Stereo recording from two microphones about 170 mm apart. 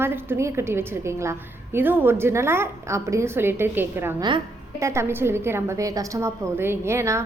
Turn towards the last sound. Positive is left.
turn(degrees=-15)  # may be behind; listen again after turning